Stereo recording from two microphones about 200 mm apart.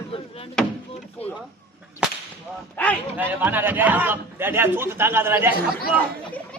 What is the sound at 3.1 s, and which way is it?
A man's voice, 10° right (ahead or behind).